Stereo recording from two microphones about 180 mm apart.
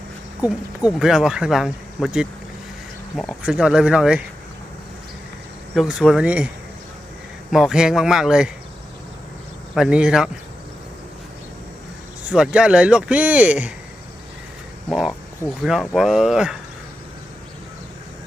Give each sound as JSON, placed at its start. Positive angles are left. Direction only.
{"t": 0.4, "sound": "speech", "side_deg": -5}
{"t": 5.7, "sound": "speech", "side_deg": -5}
{"t": 7.5, "sound": "speech", "side_deg": -5}
{"t": 9.7, "sound": "speech", "side_deg": -5}
{"t": 12.3, "sound": "speech", "side_deg": -5}
{"t": 14.8, "sound": "speech", "side_deg": 0}